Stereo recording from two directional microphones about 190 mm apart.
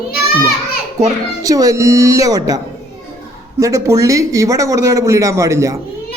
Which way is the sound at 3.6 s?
15° right (ahead or behind).